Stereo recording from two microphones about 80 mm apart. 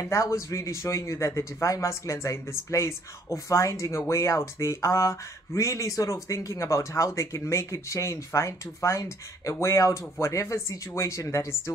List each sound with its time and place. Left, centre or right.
0.0 s speech: left